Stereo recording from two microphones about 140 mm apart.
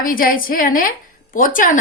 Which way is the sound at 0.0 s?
90° left.